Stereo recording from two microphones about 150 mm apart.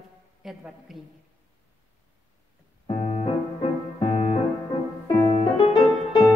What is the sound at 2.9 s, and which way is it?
Music, 40° left (ahead or behind).